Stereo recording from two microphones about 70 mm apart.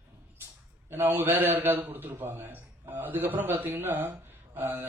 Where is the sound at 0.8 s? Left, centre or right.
Right.